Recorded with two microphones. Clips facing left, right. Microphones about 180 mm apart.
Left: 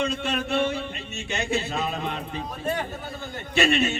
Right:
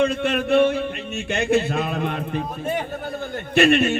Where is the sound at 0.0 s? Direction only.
55° right (ahead or behind).